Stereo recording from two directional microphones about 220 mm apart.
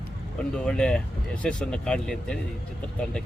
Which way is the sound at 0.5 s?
5° left (ahead or behind).